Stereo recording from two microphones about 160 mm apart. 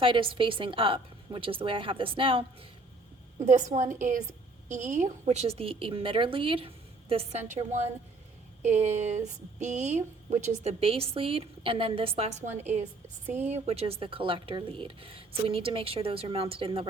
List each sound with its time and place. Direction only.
0.0 s speech: 30° right (ahead or behind)
3.4 s a woman's voice: 50° right (ahead or behind)
13.2 s speech: 10° right (ahead or behind)
13.5 s speech: 40° right (ahead or behind)